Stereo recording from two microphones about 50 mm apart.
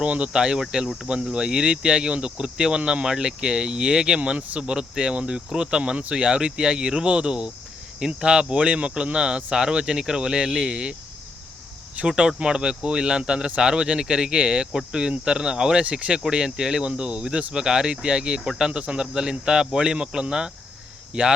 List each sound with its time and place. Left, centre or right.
0.0 s speech: right
4.2 s speech: right
12.0 s speech: centre